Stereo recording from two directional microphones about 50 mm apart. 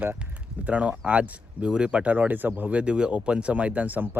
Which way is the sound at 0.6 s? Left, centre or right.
Right.